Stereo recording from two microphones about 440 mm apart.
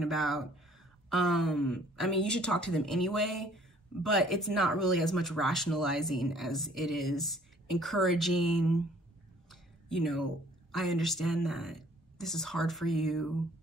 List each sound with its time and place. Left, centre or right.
0.0 s speech: centre